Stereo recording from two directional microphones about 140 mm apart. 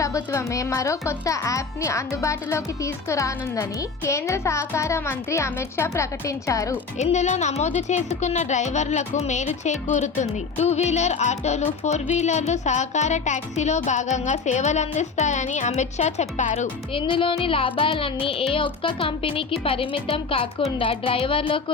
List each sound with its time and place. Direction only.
0.0 s speech: 20° left (ahead or behind)
7.0 s speech: 55° left (ahead or behind)
16.9 s speech: 40° left (ahead or behind)